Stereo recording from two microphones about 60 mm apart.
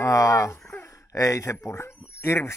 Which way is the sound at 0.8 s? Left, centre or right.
Left.